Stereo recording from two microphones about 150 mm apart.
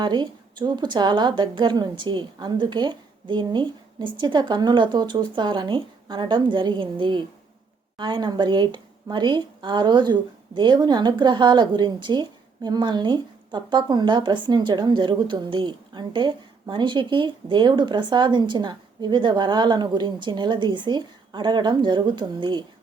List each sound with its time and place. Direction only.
0.0 s speech: 30° right (ahead or behind)